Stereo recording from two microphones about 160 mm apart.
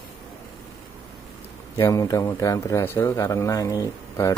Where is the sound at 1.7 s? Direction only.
20° left (ahead or behind).